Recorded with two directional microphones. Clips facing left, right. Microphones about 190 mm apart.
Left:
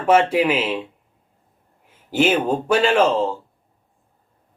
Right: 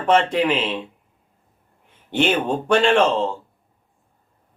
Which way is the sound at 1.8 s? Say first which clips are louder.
Left 2 dB; 5° left (ahead or behind).